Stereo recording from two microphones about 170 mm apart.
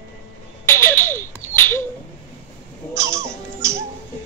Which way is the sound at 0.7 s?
15° left (ahead or behind).